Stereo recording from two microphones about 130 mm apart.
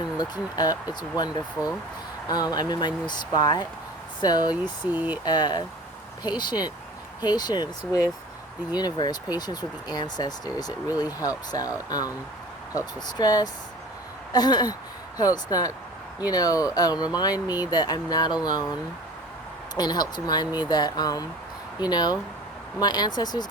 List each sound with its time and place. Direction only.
0.2 s speech: 30° left (ahead or behind)
4.9 s speech: 10° right (ahead or behind)
5.2 s speech: 35° left (ahead or behind)
19.7 s speech: 30° left (ahead or behind)